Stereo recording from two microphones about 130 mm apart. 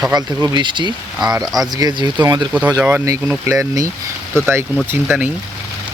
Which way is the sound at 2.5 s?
10° right (ahead or behind).